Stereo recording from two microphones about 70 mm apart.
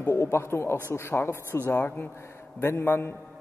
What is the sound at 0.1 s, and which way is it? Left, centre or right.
A man's voice, left.